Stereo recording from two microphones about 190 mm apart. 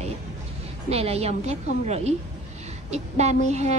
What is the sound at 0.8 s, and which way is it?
A woman's voice, 35° right (ahead or behind).